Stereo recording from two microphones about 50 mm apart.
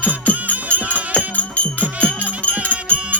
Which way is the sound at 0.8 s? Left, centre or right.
Right.